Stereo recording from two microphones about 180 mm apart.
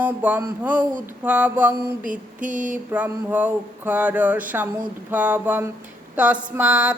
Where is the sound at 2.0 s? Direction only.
45° right (ahead or behind).